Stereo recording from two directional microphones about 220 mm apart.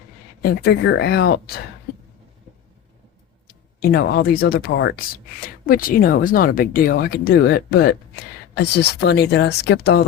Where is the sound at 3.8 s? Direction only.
45° left (ahead or behind).